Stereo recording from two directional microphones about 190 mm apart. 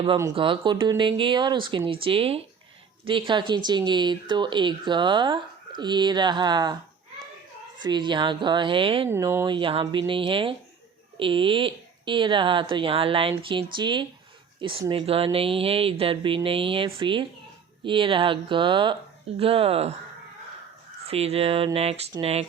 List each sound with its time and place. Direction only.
0.0 s speech: 20° right (ahead or behind)
7.8 s speech: 25° right (ahead or behind)
9.0 s speech: 15° right (ahead or behind); by 19.9 s 30° right (ahead or behind)
21.1 s speech: 30° right (ahead or behind)